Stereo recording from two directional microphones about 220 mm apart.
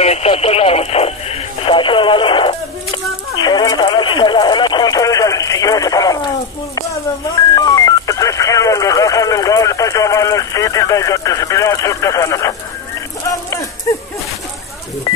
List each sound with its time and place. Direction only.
0.0 s radio: 30° left (ahead or behind)
7.5 s telephone dialing: 15° left (ahead or behind)
13.3 s a sound: 15° left (ahead or behind)
15.1 s telephone dialing: 15° left (ahead or behind)